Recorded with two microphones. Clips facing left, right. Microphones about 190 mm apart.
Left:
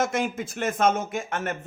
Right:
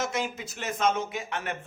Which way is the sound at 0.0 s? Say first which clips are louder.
Left 5 dB; 50° left (ahead or behind).